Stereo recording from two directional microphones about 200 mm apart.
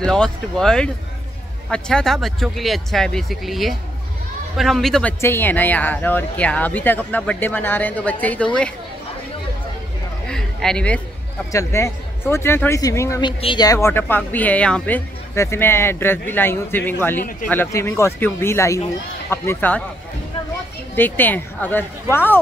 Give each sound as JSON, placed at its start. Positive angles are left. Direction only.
{"t": 0.0, "sound": "speech", "side_deg": 5}
{"t": 10.2, "sound": "a sound", "side_deg": 5}
{"t": 11.5, "sound": "speech", "side_deg": 15}
{"t": 20.9, "sound": "speech", "side_deg": 10}